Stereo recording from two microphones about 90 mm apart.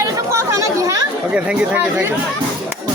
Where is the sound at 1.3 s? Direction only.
15° right (ahead or behind).